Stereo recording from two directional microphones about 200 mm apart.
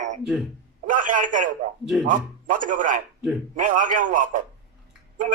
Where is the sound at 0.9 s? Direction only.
40° right (ahead or behind).